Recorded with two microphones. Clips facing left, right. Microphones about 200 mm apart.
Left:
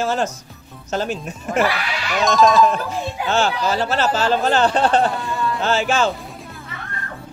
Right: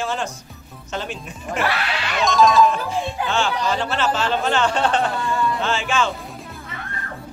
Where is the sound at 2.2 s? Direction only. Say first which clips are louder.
Left 1 dB; centre (ahead or behind).